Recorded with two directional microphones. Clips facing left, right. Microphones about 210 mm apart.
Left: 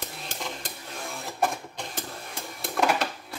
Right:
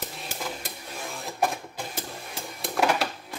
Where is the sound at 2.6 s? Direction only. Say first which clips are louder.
Right 1 dB; 5° right (ahead or behind).